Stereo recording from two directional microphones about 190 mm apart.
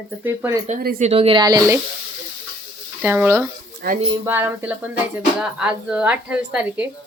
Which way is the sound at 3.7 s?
50° right (ahead or behind).